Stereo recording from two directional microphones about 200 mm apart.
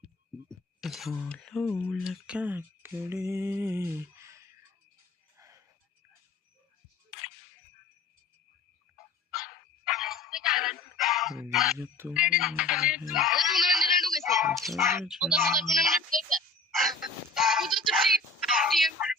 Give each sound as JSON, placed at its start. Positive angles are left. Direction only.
{"t": 0.8, "sound": "speech", "side_deg": 0}
{"t": 5.4, "sound": "music", "side_deg": -15}
{"t": 9.3, "sound": "dog", "side_deg": 0}
{"t": 11.5, "sound": "speech", "side_deg": 0}
{"t": 11.8, "sound": "speech", "side_deg": -10}
{"t": 17.0, "sound": "a sound", "side_deg": 0}
{"t": 18.4, "sound": "whispering", "side_deg": 0}